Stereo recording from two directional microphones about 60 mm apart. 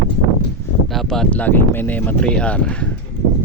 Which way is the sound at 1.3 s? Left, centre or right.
Left.